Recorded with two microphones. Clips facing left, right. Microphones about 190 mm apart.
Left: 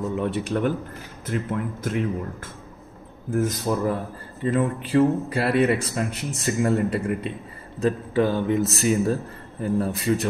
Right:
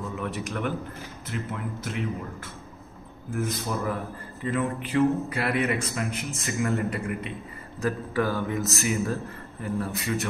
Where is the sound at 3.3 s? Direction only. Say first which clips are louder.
Left 6 dB; 40° left (ahead or behind).